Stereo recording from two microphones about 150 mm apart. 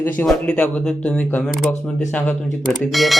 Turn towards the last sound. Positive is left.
turn(degrees=0)  # may be behind; listen again after turning